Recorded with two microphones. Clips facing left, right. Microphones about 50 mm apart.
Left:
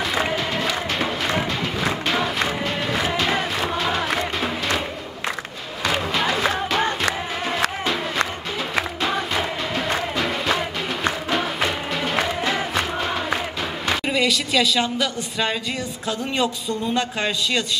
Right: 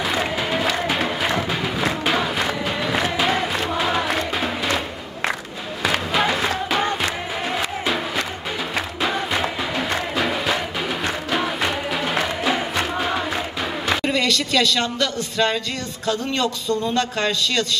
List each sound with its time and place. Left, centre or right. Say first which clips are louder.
0.0 s music: even; centre
6.1 s music: right 1 dB; centre
9.0 s music: right 4 dB; centre
14.0 s a man's voice: right 1 dB; centre